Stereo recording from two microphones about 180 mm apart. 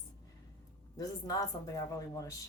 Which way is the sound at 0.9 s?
20° left (ahead or behind).